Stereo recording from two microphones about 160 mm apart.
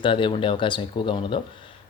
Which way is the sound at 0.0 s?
30° left (ahead or behind).